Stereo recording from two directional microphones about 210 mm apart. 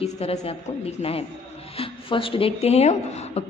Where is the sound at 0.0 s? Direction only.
30° left (ahead or behind).